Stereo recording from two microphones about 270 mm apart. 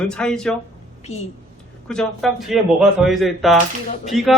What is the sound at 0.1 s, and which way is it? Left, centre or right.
Speech, centre.